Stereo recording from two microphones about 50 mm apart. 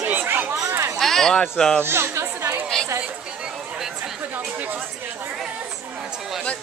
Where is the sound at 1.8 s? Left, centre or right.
Right.